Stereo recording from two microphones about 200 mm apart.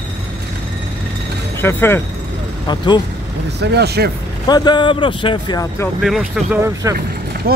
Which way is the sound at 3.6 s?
55° right (ahead or behind).